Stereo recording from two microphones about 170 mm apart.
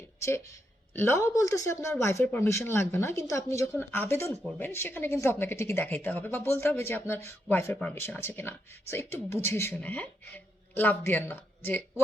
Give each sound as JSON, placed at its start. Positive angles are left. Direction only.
{"t": 0.2, "sound": "speech", "side_deg": 15}